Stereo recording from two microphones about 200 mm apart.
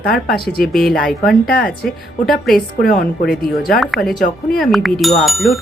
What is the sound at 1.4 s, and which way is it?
Speech, 50° left (ahead or behind).